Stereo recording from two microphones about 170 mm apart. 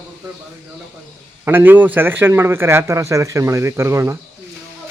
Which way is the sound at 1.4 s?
10° right (ahead or behind).